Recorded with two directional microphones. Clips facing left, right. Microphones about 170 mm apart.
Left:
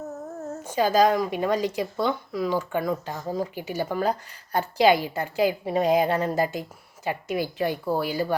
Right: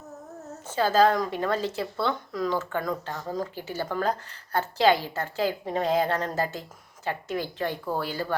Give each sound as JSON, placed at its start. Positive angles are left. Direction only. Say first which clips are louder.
{"t": 0.0, "sound": "humming", "louder": "left 8 dB", "side_deg": 50}
{"t": 0.6, "sound": "a woman's voice", "louder": "left 1 dB", "side_deg": 15}